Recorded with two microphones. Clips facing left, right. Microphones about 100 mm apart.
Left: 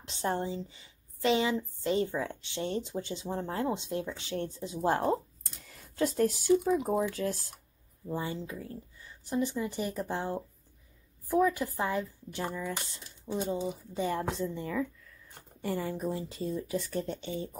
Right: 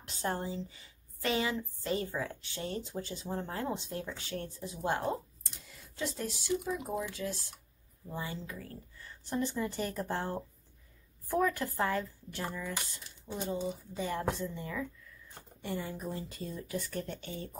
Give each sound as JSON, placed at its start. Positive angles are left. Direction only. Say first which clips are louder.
{"t": 0.1, "sound": "a woman's voice", "louder": "left 3 dB", "side_deg": 25}
{"t": 5.9, "sound": "speech", "louder": "left 10 dB", "side_deg": 50}
{"t": 8.1, "sound": "a woman's voice", "louder": "left 5 dB", "side_deg": 30}